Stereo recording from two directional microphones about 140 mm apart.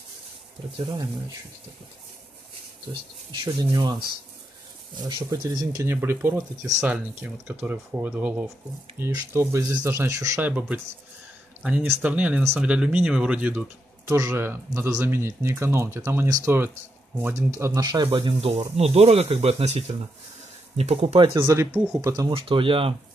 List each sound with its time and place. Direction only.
2.9 s speech: 35° right (ahead or behind)
4.9 s speech: 30° right (ahead or behind)
5.8 s speech: 15° right (ahead or behind)
11.6 s speech: 10° right (ahead or behind)
14.0 s speech: 20° right (ahead or behind); by 21.5 s 35° right (ahead or behind)
21.5 s speech: 20° right (ahead or behind)
22.3 s speech: 40° right (ahead or behind)